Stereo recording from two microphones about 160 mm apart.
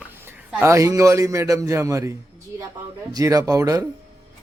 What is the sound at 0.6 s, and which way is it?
A man's voice, 20° right (ahead or behind).